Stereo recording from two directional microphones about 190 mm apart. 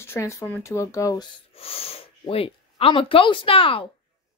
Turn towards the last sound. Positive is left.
turn(degrees=30)  # may be behind; listen again after turning